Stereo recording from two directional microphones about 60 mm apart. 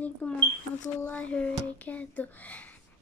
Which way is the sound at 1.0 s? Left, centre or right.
Left.